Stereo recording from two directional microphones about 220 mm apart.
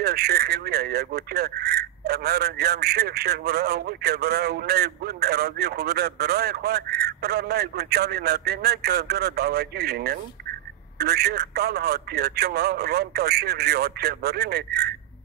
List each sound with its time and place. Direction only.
0.0 s speech: 45° right (ahead or behind)